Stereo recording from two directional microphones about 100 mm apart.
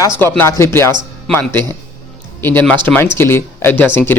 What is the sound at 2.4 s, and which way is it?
Speech, 20° left (ahead or behind).